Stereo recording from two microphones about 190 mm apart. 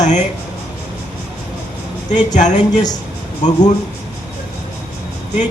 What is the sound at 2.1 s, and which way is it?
Speech, 40° left (ahead or behind).